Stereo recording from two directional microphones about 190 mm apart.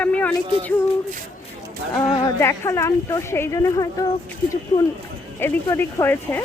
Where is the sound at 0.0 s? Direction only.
10° left (ahead or behind).